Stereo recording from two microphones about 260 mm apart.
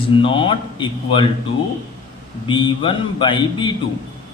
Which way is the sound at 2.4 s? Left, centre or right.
Centre.